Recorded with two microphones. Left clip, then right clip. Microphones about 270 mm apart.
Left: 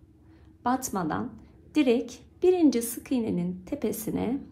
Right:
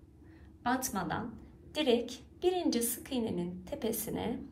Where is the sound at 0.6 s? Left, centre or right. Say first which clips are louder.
Left 5 dB; centre.